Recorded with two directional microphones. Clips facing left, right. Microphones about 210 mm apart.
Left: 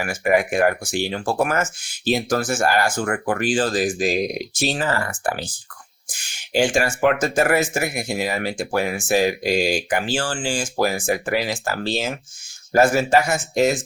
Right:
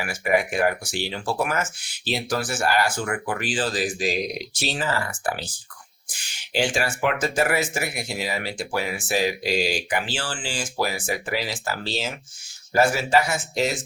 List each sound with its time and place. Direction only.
0.0 s speech: 50° left (ahead or behind)
6.2 s speech: 45° left (ahead or behind)